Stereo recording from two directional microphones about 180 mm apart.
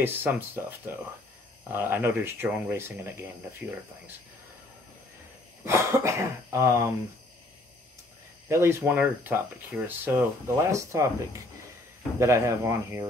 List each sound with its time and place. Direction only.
0.0 s speech: 10° right (ahead or behind)
5.7 s speech: 15° right (ahead or behind)
8.5 s speech: 15° right (ahead or behind)